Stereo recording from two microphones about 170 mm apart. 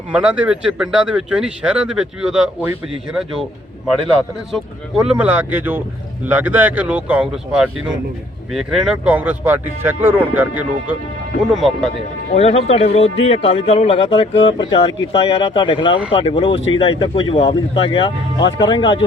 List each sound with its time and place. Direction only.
0.1 s speech: 5° right (ahead or behind)
4.5 s speech: 5° right (ahead or behind)
12.3 s speech: 40° left (ahead or behind)